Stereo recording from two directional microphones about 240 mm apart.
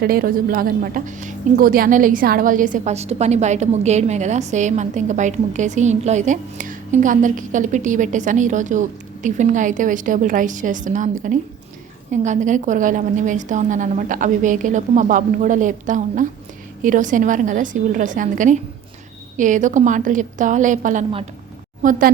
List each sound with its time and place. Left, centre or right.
0.0 s a woman's voice: right
12.1 s a woman's voice: right